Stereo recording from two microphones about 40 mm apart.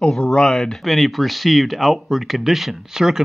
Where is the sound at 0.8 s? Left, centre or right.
Centre.